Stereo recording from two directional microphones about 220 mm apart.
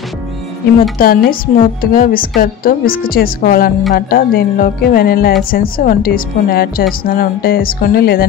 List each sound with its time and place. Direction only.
0.9 s a woman's voice: 40° left (ahead or behind)